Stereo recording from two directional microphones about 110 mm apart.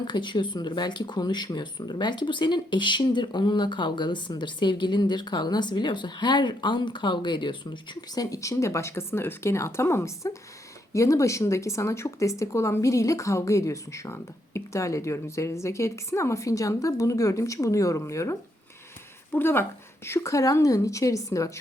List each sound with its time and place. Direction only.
0.1 s speech: 40° left (ahead or behind)